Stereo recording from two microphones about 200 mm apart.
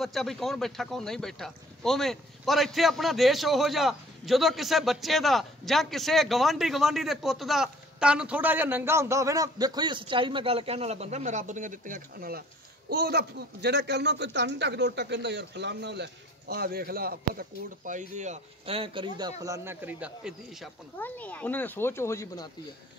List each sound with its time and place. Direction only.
0.0 s a man's voice: centre (ahead or behind)
21.0 s speech: 10° left (ahead or behind)